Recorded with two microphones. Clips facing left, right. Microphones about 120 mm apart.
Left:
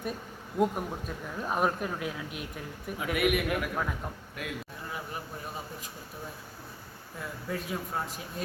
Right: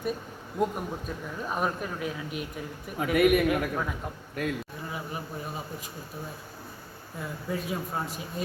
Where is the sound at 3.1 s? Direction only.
40° right (ahead or behind).